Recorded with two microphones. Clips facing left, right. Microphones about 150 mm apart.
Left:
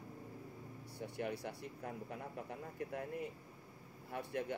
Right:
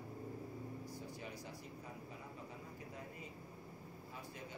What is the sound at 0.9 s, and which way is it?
A man's voice, 65° left (ahead or behind).